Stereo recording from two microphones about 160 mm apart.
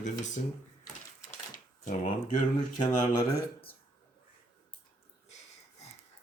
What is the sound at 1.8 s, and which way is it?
Speech, 55° left (ahead or behind).